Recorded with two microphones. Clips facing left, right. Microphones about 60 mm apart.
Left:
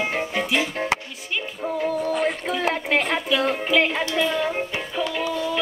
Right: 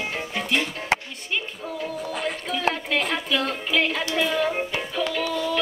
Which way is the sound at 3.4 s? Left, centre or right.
Left.